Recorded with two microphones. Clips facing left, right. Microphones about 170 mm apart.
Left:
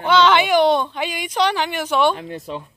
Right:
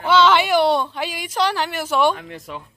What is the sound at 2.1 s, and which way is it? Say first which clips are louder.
Speech: left 3 dB; 30° left (ahead or behind).